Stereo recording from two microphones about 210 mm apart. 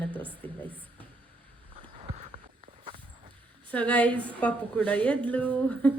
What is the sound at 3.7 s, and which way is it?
Speech, 5° left (ahead or behind).